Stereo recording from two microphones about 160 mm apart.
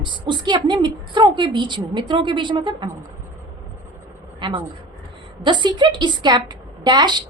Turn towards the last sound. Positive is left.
turn(degrees=-25)  # may be behind; listen again after turning